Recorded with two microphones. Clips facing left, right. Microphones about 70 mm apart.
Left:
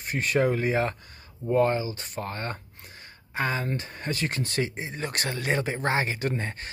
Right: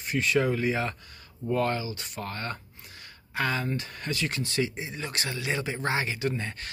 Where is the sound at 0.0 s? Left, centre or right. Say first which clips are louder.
Left 1 dB; left.